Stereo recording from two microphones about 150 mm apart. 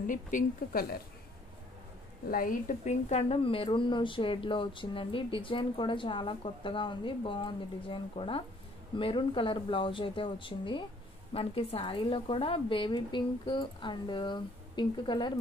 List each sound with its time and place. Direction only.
0.0 s speech: 60° left (ahead or behind)
2.3 s speech: 65° left (ahead or behind); by 15.3 s 30° left (ahead or behind)